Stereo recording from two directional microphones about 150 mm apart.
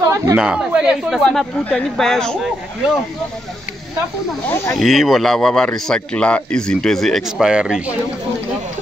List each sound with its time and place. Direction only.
0.0 s a sound: 20° right (ahead or behind)
0.4 s a man's voice: 5° right (ahead or behind)
4.5 s speech: 15° left (ahead or behind)
4.7 s a man's voice: centre (ahead or behind)